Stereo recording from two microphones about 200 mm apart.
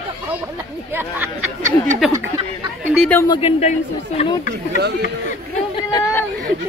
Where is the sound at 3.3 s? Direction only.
30° left (ahead or behind).